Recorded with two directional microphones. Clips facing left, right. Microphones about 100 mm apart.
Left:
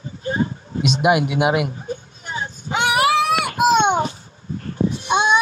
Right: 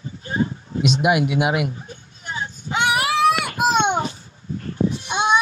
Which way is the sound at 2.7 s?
75° left (ahead or behind).